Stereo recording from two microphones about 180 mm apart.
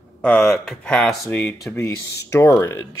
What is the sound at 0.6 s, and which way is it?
Speech, 5° left (ahead or behind).